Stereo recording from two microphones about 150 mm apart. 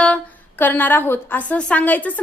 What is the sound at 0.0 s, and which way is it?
A woman's voice, 10° left (ahead or behind).